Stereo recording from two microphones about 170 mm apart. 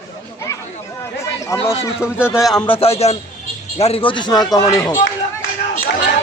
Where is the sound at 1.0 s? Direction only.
15° left (ahead or behind).